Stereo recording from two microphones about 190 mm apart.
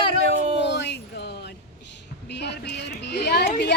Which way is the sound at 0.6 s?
65° left (ahead or behind).